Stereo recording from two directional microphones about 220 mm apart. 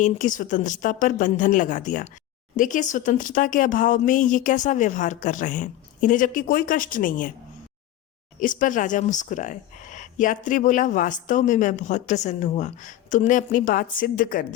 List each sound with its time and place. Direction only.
0.0 s speech: 35° left (ahead or behind)
8.4 s speech: 35° left (ahead or behind)